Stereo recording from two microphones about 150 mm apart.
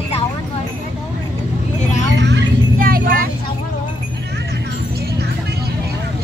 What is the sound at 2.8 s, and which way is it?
Vehicle, 75° right (ahead or behind).